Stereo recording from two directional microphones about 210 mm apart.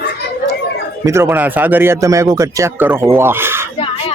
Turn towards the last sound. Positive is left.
turn(degrees=-10)  # may be behind; listen again after turning